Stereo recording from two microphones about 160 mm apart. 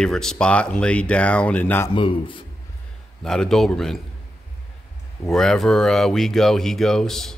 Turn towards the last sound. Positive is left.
turn(degrees=5)  # may be behind; listen again after turning